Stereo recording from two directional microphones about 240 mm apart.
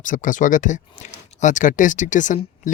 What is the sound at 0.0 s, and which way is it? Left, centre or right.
Speech, left.